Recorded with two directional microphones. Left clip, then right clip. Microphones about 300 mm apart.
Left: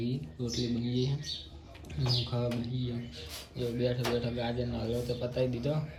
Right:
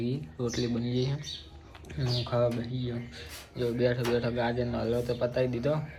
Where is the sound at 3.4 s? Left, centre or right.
Centre.